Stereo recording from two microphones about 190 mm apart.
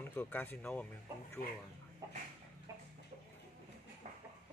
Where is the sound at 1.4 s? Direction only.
50° left (ahead or behind).